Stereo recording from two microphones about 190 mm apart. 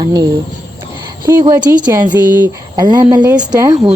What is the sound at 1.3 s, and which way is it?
Speech, 15° right (ahead or behind).